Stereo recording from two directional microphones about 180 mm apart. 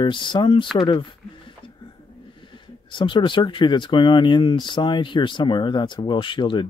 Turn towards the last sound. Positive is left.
turn(degrees=25)  # may be behind; listen again after turning